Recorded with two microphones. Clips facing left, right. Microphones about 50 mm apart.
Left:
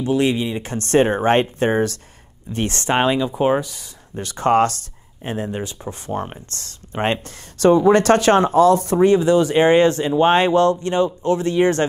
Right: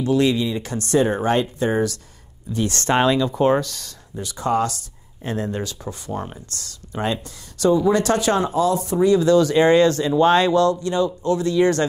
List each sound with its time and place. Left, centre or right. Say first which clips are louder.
0.0 s speech: even; left
2.8 s speech: even; left
4.1 s speech: left 5 dB; left
5.2 s speech: even; left
9.2 s speech: even; left